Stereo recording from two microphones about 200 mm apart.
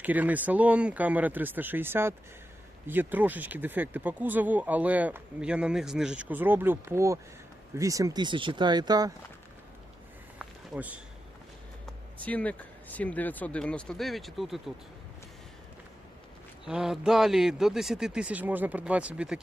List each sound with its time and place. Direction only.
0.0 s speech: 10° right (ahead or behind)
10.3 s a sound: 5° right (ahead or behind)
12.2 s speech: 5° left (ahead or behind)
16.6 s a man's voice: centre (ahead or behind)